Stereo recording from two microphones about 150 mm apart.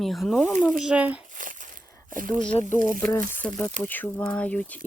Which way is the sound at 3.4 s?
15° left (ahead or behind).